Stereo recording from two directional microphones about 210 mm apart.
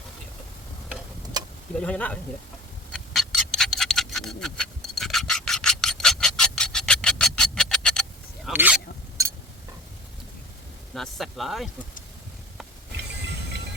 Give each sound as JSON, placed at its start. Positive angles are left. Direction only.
{"t": 1.8, "sound": "speech", "side_deg": 5}
{"t": 2.9, "sound": "a sound", "side_deg": 0}
{"t": 10.9, "sound": "speech", "side_deg": 0}